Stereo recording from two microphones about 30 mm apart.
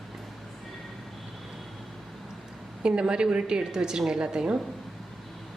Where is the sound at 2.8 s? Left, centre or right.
Right.